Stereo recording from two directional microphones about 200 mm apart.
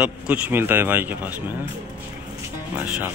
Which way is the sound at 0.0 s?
5° right (ahead or behind).